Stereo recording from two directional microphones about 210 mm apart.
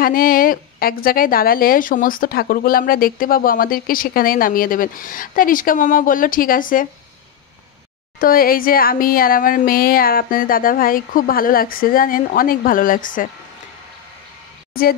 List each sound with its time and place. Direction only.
0.0 s a woman's voice: 45° left (ahead or behind)
8.2 s a woman's voice: 45° left (ahead or behind)
14.7 s speech: 45° left (ahead or behind)